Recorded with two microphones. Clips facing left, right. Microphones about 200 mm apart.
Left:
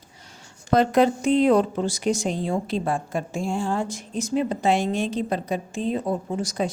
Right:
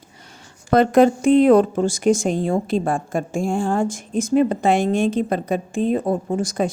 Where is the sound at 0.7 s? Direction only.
55° right (ahead or behind).